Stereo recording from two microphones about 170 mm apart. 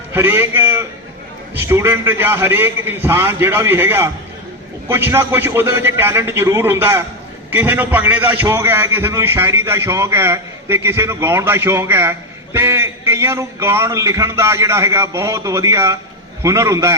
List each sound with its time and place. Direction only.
0.1 s a man's voice: 15° right (ahead or behind)